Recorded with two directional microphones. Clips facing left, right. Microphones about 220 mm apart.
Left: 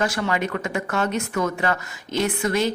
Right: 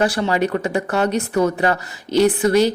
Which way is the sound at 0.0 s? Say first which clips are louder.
Right 5 dB; 30° right (ahead or behind).